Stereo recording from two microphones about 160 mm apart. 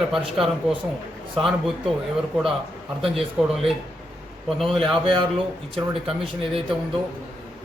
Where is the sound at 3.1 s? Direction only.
Centre (ahead or behind).